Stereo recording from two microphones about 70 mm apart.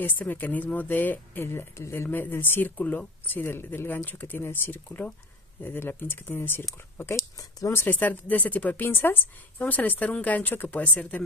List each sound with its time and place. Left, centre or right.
0.0 s speech: left
7.7 s speech: left